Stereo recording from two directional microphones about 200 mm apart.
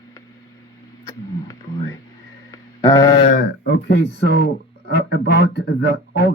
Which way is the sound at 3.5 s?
55° left (ahead or behind).